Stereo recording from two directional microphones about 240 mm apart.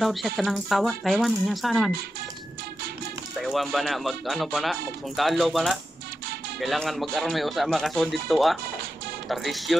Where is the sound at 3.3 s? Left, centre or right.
Centre.